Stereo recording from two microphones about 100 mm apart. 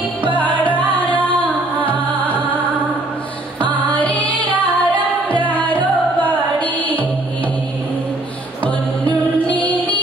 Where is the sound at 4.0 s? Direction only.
15° left (ahead or behind).